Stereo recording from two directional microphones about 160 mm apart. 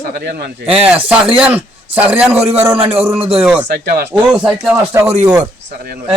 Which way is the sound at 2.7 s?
35° right (ahead or behind).